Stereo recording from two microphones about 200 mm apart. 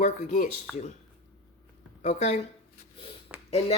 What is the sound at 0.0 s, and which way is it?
Speech, 40° left (ahead or behind).